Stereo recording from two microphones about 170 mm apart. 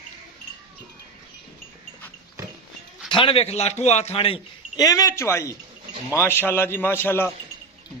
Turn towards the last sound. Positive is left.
turn(degrees=15)  # may be behind; listen again after turning